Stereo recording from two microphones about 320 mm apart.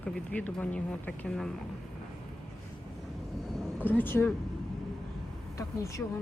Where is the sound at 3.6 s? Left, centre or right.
Centre.